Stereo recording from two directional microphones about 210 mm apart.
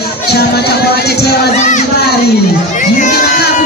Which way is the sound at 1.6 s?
35° left (ahead or behind).